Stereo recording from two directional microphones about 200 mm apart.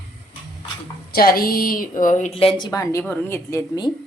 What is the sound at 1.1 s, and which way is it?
A woman's voice, 50° left (ahead or behind).